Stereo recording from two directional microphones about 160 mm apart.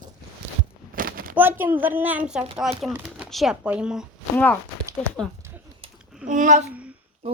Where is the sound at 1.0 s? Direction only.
65° right (ahead or behind).